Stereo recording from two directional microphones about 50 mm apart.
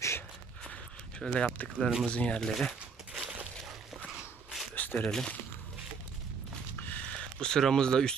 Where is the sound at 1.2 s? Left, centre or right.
Centre.